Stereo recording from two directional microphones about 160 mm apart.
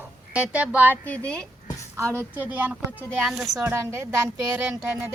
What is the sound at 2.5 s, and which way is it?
A woman's voice, 10° right (ahead or behind).